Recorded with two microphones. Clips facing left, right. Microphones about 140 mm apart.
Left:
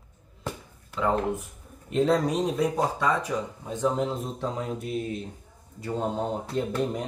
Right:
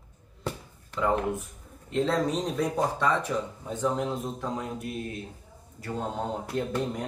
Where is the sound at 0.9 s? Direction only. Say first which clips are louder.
Even; 5° left (ahead or behind).